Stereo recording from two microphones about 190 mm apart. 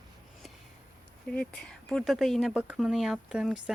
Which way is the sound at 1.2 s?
5° left (ahead or behind).